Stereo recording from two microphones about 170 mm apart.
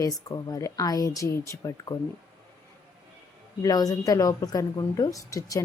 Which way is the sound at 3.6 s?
20° left (ahead or behind).